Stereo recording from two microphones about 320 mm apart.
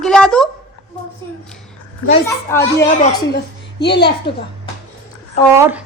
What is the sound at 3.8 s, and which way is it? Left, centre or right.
Speech, left.